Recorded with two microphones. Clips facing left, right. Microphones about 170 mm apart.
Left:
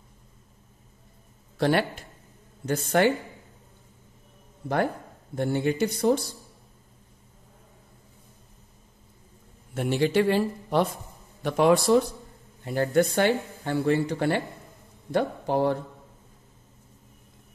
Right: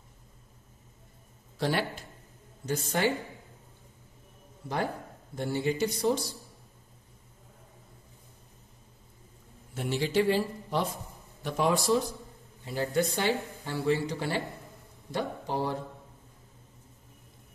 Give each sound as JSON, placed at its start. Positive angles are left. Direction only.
{"t": 1.6, "sound": "speech", "side_deg": 60}
{"t": 5.3, "sound": "speech", "side_deg": 55}
{"t": 9.8, "sound": "speech", "side_deg": 60}